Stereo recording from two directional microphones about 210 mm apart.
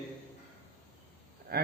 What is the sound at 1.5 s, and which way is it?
Speech, 45° right (ahead or behind).